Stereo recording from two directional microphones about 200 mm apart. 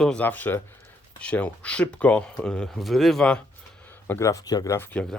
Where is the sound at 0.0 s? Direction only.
5° left (ahead or behind).